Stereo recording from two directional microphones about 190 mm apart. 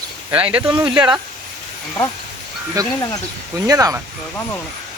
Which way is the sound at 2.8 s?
20° right (ahead or behind).